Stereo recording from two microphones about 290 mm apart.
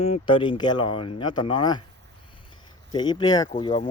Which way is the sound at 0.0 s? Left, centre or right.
Centre.